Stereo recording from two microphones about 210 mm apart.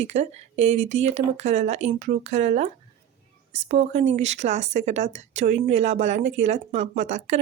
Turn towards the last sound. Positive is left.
turn(degrees=-35)  # may be behind; listen again after turning